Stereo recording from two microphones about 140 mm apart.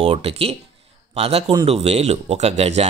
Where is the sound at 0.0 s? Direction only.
45° right (ahead or behind).